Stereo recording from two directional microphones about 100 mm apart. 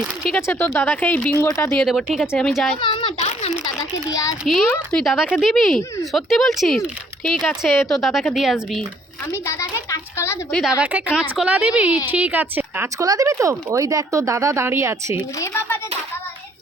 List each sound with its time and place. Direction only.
0.4 s speech: 25° left (ahead or behind)
1.5 s speech: 30° left (ahead or behind)
1.7 s speech: 5° left (ahead or behind)
2.8 s a sound: 60° left (ahead or behind); by 3.5 s 90° left
4.1 s a child's voice: 35° left (ahead or behind)
4.4 s speech: centre (ahead or behind)
7.3 s speech: 10° left (ahead or behind)
7.6 s speech: centre (ahead or behind)
9.5 s a sound: 30° left (ahead or behind)
10.8 s a woman's voice: 15° right (ahead or behind)
13.0 s speech: 35° right (ahead or behind)
15.4 s a sound: 25° left (ahead or behind)